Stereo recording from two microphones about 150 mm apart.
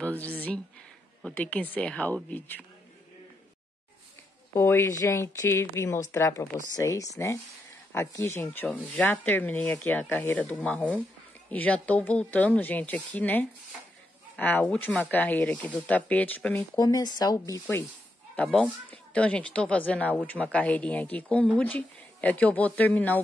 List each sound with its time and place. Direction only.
0.0 s a sound: 10° left (ahead or behind)
1.2 s speech: 10° left (ahead or behind)
4.6 s speech: 15° left (ahead or behind)
16.7 s speech: 25° left (ahead or behind)
18.3 s speech: 5° left (ahead or behind)